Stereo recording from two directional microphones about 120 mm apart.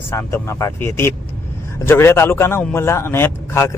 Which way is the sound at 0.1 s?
25° left (ahead or behind).